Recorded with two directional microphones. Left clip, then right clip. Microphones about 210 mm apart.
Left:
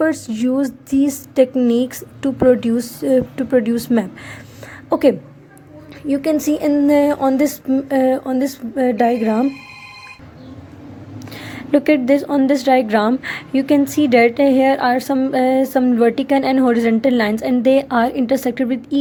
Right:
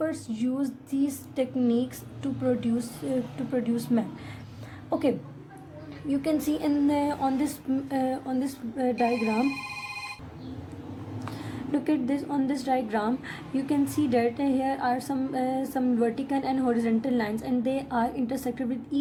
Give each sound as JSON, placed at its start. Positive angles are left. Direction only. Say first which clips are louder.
{"t": 0.0, "sound": "a woman's voice", "louder": "left 12 dB", "side_deg": 35}
{"t": 11.7, "sound": "a woman's voice", "louder": "left 14 dB", "side_deg": 35}